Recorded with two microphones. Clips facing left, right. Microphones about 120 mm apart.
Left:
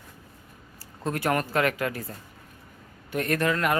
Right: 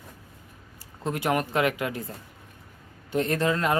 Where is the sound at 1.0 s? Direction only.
15° right (ahead or behind).